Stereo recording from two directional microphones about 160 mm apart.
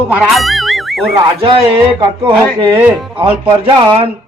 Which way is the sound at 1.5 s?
30° right (ahead or behind).